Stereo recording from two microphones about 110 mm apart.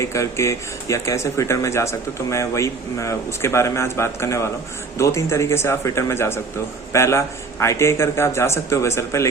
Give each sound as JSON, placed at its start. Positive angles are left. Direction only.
{"t": 0.0, "sound": "speech", "side_deg": 25}